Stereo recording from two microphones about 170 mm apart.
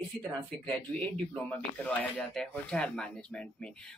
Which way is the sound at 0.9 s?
10° left (ahead or behind).